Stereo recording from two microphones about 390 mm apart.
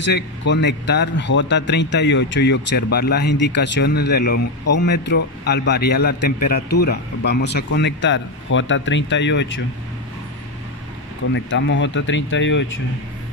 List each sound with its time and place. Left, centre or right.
0.5 s a man's voice: left
11.3 s a man's voice: left